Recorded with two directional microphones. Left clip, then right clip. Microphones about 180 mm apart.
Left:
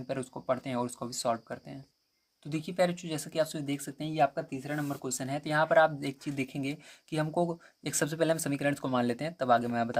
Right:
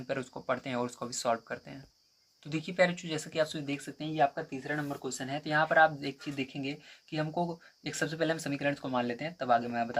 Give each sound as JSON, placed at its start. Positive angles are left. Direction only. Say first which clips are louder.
{"t": 0.1, "sound": "speech", "louder": "left 1 dB", "side_deg": 30}